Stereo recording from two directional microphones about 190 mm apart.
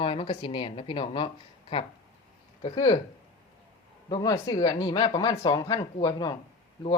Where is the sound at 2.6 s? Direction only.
25° left (ahead or behind).